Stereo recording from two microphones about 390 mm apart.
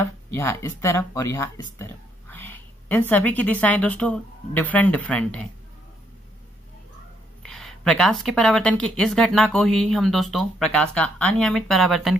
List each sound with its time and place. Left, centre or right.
0.4 s a woman's voice: centre
7.4 s a woman's voice: centre